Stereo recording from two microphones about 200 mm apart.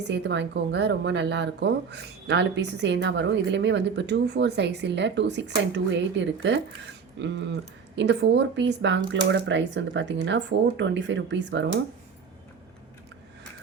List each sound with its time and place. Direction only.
0.1 s speech: 60° right (ahead or behind)